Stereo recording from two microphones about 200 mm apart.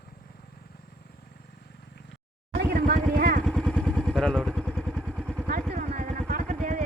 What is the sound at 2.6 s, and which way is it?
Vehicle, 50° right (ahead or behind).